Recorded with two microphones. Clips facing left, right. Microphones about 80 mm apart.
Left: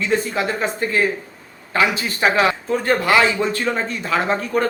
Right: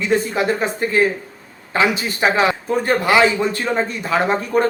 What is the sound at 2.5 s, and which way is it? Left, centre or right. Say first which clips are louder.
A man's voice: right 1 dB; centre.